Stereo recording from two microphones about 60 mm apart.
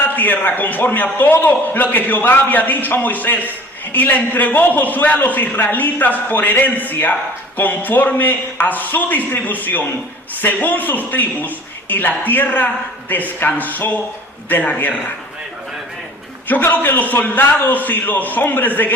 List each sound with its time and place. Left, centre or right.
0.0 s a man's voice: left
16.5 s a man's voice: left